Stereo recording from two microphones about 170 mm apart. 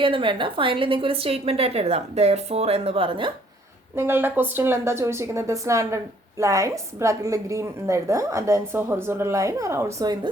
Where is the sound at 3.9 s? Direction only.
15° right (ahead or behind).